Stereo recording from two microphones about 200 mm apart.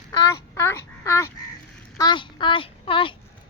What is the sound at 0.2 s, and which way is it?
A child's voice, 15° left (ahead or behind).